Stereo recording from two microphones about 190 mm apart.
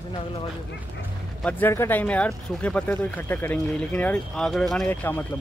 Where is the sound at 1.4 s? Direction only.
10° left (ahead or behind).